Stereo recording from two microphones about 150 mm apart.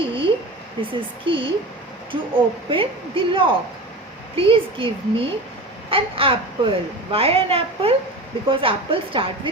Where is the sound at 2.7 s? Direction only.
35° right (ahead or behind).